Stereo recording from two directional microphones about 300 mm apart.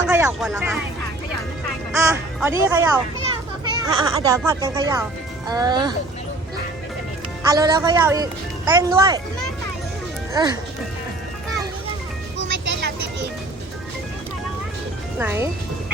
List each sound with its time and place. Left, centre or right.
0.1 s speech: centre
1.9 s speech: centre
7.4 s speech: centre
10.3 s speech: centre
12.4 s music: right
15.2 s speech: centre